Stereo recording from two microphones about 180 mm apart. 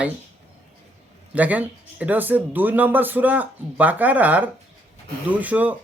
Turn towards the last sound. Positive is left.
turn(degrees=-10)  # may be behind; listen again after turning